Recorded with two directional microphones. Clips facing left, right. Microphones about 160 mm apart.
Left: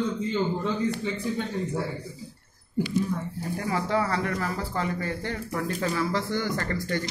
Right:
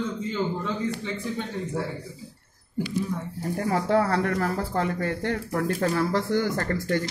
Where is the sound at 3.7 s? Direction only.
55° right (ahead or behind).